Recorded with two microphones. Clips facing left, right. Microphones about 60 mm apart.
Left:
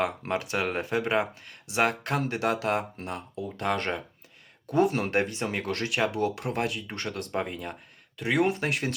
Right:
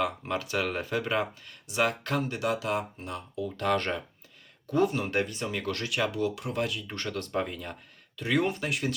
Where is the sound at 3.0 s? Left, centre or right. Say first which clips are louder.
Even; left.